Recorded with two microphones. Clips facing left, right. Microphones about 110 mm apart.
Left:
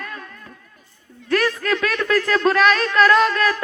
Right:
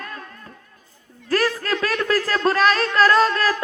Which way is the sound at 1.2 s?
30° right (ahead or behind).